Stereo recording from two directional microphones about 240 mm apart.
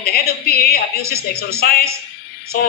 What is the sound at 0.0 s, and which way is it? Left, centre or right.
Speech, left.